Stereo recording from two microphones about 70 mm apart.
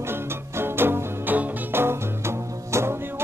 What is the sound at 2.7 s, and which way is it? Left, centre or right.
Music, right.